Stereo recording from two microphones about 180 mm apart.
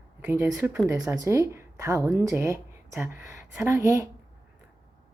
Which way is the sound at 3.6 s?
15° right (ahead or behind).